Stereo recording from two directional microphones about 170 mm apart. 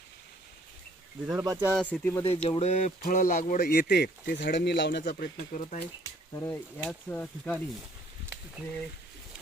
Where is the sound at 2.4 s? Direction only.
35° left (ahead or behind).